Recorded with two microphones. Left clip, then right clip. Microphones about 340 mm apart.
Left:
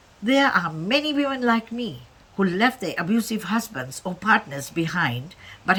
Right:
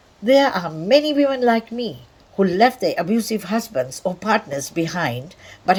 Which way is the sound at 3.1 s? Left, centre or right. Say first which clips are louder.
Right 3 dB; centre.